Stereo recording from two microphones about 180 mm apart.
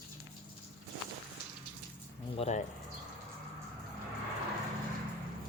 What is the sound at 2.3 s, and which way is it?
Speech, 35° left (ahead or behind).